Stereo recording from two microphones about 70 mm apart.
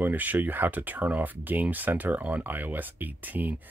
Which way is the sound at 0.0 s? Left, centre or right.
Right.